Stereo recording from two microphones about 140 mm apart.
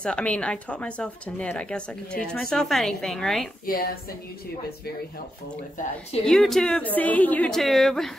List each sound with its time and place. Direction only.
0.0 s a woman's voice: 5° left (ahead or behind)
3.6 s a woman's voice: 90° left
6.2 s a woman's voice: 5° left (ahead or behind)